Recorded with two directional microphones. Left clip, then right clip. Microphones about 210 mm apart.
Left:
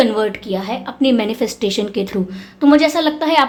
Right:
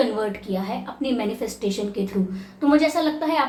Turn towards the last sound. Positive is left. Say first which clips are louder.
# left 7 dB
turn(degrees=45)  # may be behind; listen again after turning